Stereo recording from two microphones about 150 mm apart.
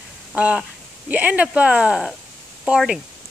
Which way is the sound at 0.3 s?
5° right (ahead or behind).